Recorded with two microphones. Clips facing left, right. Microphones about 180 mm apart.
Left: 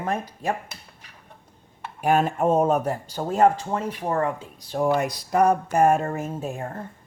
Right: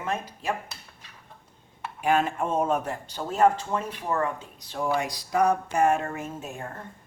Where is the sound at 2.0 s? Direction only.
45° left (ahead or behind).